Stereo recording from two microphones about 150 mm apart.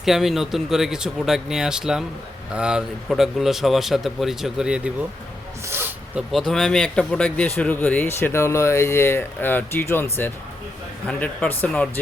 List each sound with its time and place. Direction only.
0.0 s speech: centre (ahead or behind)
5.6 s a sound: 15° right (ahead or behind)
6.2 s speech: 5° right (ahead or behind)
6.5 s speech: 5° left (ahead or behind)